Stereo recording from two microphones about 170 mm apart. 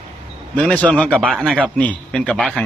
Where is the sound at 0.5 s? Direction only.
5° left (ahead or behind).